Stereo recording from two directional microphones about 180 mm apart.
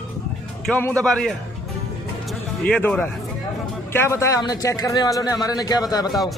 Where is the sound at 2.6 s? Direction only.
5° left (ahead or behind).